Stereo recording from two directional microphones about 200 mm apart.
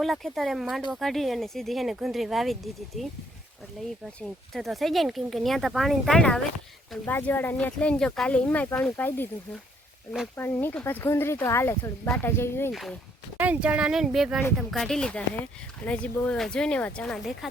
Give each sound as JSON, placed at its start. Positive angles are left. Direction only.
{"t": 0.0, "sound": "speech", "side_deg": 0}
{"t": 4.2, "sound": "speech", "side_deg": 0}
{"t": 10.3, "sound": "speech", "side_deg": 10}
{"t": 12.7, "sound": "speech", "side_deg": 0}